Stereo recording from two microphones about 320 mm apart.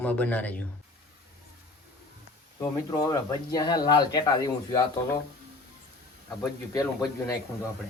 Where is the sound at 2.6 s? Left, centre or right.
Centre.